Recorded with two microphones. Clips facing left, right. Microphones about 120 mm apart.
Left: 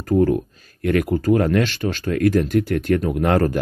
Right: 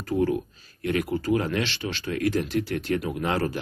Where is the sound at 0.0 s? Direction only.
50° left (ahead or behind).